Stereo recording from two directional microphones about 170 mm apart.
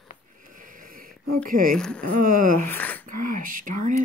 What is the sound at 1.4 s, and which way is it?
Speech, 55° right (ahead or behind).